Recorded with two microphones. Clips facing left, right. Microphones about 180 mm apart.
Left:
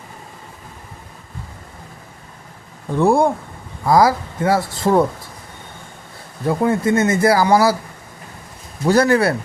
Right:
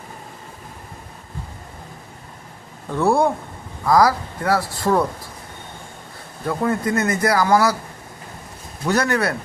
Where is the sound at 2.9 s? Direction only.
15° left (ahead or behind).